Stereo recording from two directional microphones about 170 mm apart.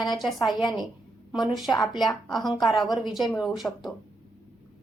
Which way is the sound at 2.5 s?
25° left (ahead or behind).